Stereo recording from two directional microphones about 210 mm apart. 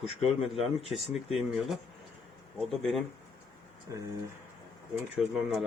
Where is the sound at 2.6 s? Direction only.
Centre (ahead or behind).